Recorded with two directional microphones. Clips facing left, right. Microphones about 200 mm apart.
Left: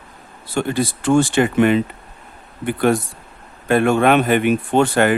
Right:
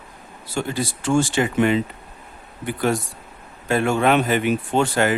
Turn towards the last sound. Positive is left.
turn(degrees=55)  # may be behind; listen again after turning